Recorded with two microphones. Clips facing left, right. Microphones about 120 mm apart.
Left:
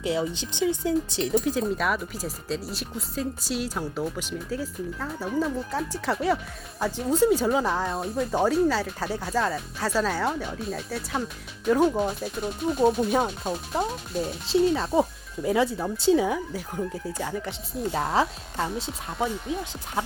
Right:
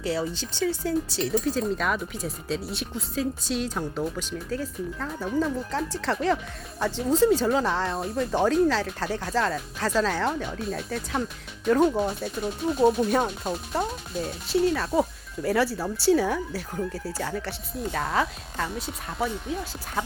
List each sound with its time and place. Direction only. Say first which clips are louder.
0.0 s speech: left 1 dB; 15° left (ahead or behind)
1.8 s speech: even; 5° left (ahead or behind)
7.9 s speech: even; centre (ahead or behind)
14.4 s speech: left 1 dB; 25° left (ahead or behind)
18.1 s speech: left 2 dB; 25° left (ahead or behind)